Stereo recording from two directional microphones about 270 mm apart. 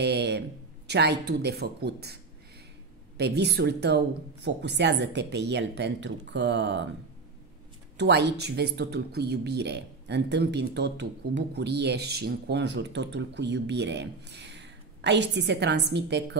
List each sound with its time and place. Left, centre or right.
0.0 s a sound: right
0.8 s speech: right
3.2 s speech: right
8.0 s speech: right